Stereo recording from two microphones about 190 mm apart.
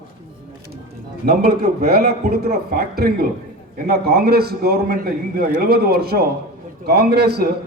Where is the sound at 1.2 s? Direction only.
55° right (ahead or behind).